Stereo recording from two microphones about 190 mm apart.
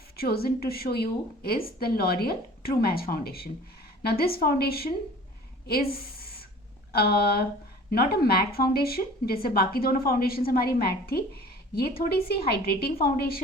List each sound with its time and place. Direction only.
0.2 s a woman's voice: 55° left (ahead or behind)